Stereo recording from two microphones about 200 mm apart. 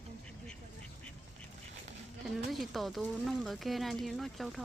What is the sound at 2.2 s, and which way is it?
Speech, centre (ahead or behind).